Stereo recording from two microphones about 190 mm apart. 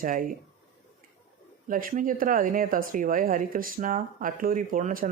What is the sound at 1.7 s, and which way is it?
Speech, 45° right (ahead or behind).